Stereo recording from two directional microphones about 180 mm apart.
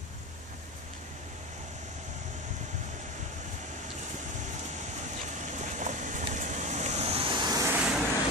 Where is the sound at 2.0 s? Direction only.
40° right (ahead or behind); by 7.8 s 15° right (ahead or behind).